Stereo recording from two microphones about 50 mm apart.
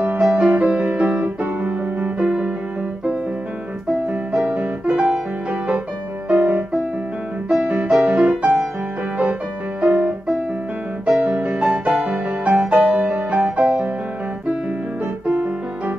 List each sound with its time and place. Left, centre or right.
0.2 s music: right
1.2 s piano: right
2.2 s music: right
4.4 s music: right
7.4 s music: centre
9.8 s music: right
11.1 s music: right
15.2 s piano: right